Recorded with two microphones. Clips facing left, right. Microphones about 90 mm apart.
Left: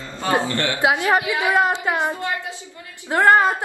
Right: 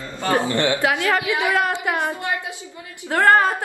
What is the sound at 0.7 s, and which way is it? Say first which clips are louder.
A woman's voice: left 2 dB; 20° left (ahead or behind).